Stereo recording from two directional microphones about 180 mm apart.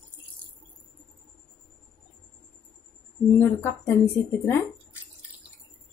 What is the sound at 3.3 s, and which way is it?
Speech, 15° left (ahead or behind).